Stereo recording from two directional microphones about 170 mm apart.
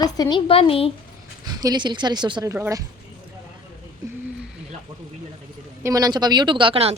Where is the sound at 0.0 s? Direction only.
25° left (ahead or behind).